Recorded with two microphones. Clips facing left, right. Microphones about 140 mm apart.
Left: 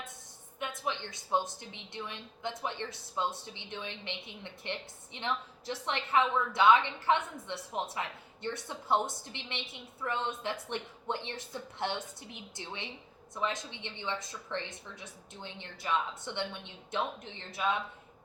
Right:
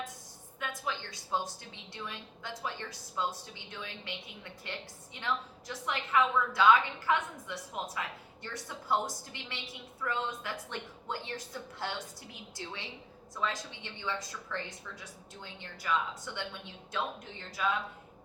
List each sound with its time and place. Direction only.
0.6 s a woman's voice: 20° left (ahead or behind)
17.6 s a woman's voice: 20° left (ahead or behind)